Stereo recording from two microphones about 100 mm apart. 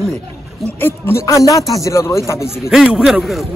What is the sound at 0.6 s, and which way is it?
Speech, 25° left (ahead or behind).